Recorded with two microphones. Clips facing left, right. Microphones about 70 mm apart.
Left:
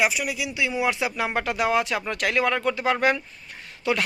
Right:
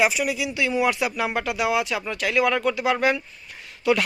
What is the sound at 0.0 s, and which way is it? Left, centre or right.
A man's voice, centre.